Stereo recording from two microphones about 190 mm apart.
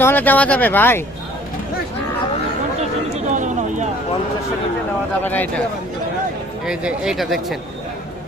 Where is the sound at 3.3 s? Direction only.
40° right (ahead or behind).